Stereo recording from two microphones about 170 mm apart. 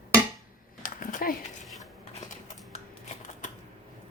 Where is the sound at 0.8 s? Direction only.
50° left (ahead or behind).